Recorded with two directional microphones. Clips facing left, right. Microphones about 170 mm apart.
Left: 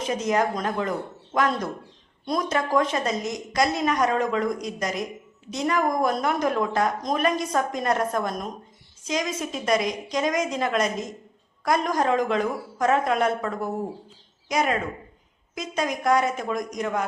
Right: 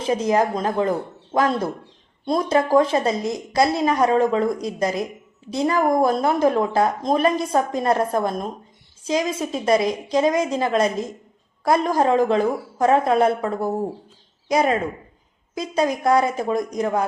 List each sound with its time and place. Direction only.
0.0 s speech: 30° right (ahead or behind)